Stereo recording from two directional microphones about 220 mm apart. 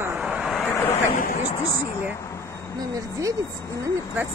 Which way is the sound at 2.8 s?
15° right (ahead or behind).